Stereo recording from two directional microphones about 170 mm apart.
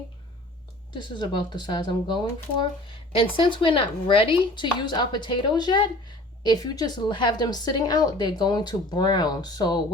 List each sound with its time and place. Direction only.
0.9 s speech: 25° left (ahead or behind)